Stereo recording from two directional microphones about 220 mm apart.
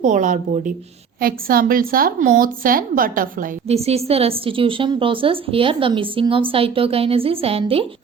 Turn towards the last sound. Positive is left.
turn(degrees=-25)  # may be behind; listen again after turning